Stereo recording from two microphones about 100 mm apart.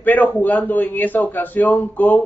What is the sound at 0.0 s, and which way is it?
A man's voice, 15° left (ahead or behind).